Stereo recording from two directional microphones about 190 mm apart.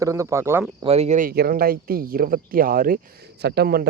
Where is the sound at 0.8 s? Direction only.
35° right (ahead or behind).